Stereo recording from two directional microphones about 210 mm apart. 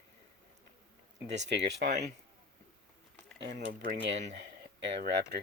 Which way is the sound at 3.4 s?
55° right (ahead or behind).